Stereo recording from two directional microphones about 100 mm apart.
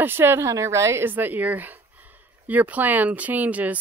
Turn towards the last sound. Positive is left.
turn(degrees=-15)  # may be behind; listen again after turning